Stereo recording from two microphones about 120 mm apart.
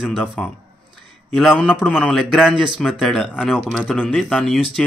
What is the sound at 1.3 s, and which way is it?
Speech, centre (ahead or behind).